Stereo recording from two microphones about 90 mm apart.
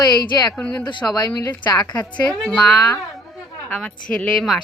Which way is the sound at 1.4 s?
20° left (ahead or behind).